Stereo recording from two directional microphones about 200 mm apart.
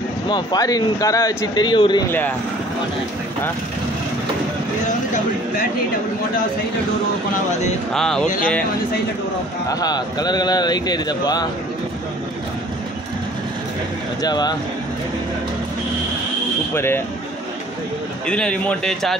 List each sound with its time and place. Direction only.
0.3 s speech: 20° left (ahead or behind)
2.0 s speech: 10° left (ahead or behind)
7.9 s a man's voice: centre (ahead or behind)
9.7 s speech: 20° left (ahead or behind)
14.2 s speech: 20° left (ahead or behind)
16.7 s speech: 10° left (ahead or behind)
18.2 s a man's voice: 5° left (ahead or behind)